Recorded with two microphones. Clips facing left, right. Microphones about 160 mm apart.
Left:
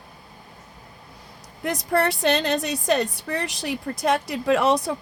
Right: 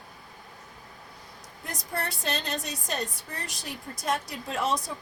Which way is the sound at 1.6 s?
70° left (ahead or behind).